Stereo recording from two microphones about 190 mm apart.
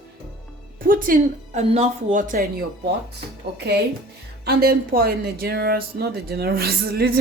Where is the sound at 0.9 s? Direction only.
45° right (ahead or behind).